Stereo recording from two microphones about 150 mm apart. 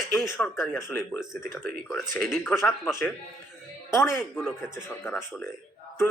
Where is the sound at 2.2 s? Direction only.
5° left (ahead or behind).